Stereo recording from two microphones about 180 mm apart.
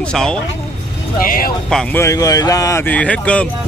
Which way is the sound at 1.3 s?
50° left (ahead or behind).